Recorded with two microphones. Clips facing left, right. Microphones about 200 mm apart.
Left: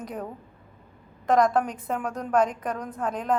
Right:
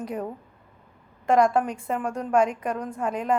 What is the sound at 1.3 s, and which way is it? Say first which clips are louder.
A woman's voice: right 1 dB; 10° right (ahead or behind).